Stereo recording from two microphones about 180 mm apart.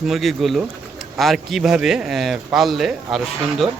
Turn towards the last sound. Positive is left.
turn(degrees=0)  # may be behind; listen again after turning